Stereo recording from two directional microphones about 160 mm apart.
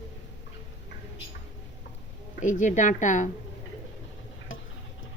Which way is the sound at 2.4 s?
50° left (ahead or behind).